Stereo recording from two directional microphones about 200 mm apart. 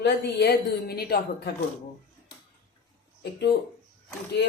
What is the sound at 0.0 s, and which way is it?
A man's voice, 55° left (ahead or behind).